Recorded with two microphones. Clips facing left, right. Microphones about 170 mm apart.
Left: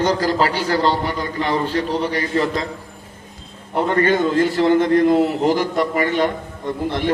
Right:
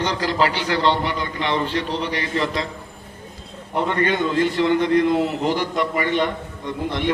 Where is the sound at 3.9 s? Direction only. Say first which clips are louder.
Left 5 dB; 45° left (ahead or behind).